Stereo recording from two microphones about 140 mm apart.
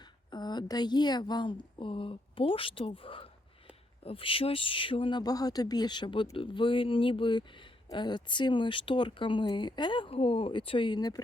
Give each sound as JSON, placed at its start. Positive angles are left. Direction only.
{"t": 0.0, "sound": "a woman's voice", "side_deg": 30}